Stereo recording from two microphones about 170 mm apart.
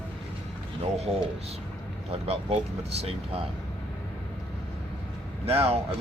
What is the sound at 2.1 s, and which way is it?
Speech, 35° right (ahead or behind).